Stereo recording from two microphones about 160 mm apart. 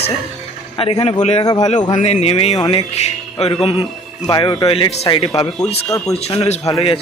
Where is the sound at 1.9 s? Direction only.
45° left (ahead or behind); by 5.5 s 30° left (ahead or behind).